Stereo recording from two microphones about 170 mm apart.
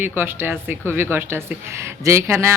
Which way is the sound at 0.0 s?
10° right (ahead or behind).